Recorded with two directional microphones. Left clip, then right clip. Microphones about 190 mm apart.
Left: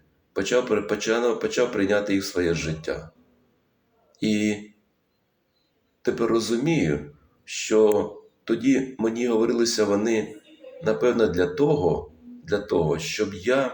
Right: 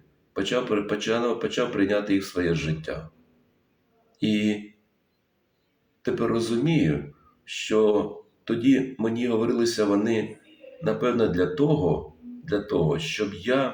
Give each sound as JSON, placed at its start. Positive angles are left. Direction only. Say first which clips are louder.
{"t": 0.3, "sound": "speech", "louder": "left 3 dB", "side_deg": -15}
{"t": 4.2, "sound": "speech", "louder": "left 1 dB", "side_deg": -15}
{"t": 6.0, "sound": "speech", "louder": "left 2 dB", "side_deg": -15}